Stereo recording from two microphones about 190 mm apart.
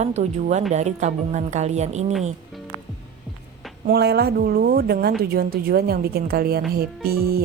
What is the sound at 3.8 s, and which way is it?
Speech, 55° right (ahead or behind).